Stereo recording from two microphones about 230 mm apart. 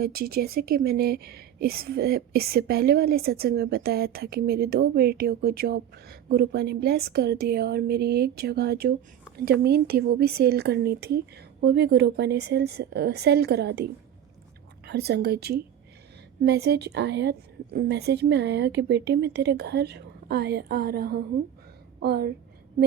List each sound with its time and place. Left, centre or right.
0.0 s a woman's voice: right
14.8 s a woman's voice: right